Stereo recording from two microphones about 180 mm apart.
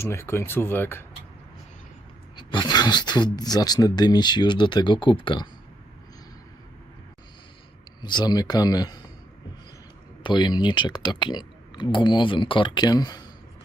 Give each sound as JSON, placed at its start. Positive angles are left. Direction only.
{"t": 0.0, "sound": "speech", "side_deg": 15}
{"t": 2.3, "sound": "speech", "side_deg": 25}
{"t": 8.0, "sound": "speech", "side_deg": 25}
{"t": 10.2, "sound": "speech", "side_deg": 25}